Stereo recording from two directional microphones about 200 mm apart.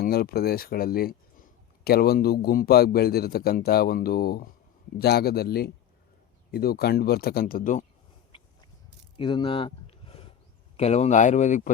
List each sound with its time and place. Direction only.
0.0 s speech: 50° left (ahead or behind)
8.3 s a sound: 25° left (ahead or behind)
10.8 s speech: 30° left (ahead or behind)